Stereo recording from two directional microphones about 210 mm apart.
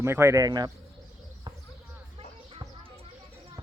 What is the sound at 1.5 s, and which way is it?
Basketball bounce, 20° right (ahead or behind).